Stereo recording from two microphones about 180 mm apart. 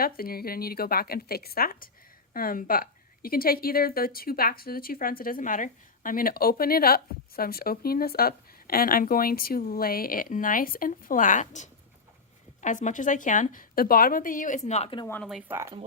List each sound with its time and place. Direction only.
0.0 s a woman's voice: 55° left (ahead or behind)
14.7 s speech: 35° left (ahead or behind)
15.0 s speech: 10° left (ahead or behind)
15.3 s speech: 5° right (ahead or behind)